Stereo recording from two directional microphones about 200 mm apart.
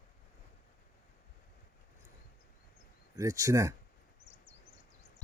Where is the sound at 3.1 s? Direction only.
15° right (ahead or behind).